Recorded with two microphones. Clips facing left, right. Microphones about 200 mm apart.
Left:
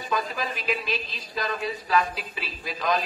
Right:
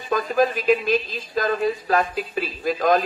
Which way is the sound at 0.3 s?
50° right (ahead or behind).